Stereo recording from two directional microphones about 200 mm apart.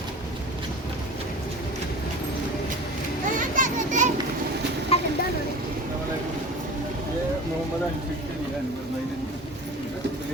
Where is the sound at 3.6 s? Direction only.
35° right (ahead or behind).